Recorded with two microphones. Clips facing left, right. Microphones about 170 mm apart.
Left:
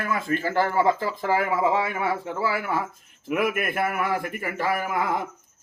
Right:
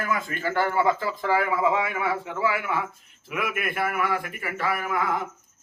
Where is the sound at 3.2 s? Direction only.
50° left (ahead or behind).